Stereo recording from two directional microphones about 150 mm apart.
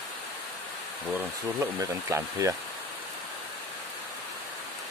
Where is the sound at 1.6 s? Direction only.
20° right (ahead or behind).